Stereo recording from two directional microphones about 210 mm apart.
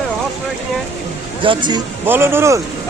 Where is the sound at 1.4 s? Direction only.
25° right (ahead or behind).